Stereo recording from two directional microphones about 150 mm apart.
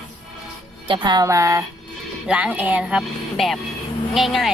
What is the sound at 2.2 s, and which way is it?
Speech, 10° right (ahead or behind).